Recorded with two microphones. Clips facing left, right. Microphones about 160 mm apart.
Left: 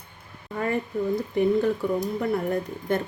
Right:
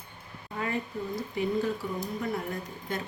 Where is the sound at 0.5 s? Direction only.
50° left (ahead or behind).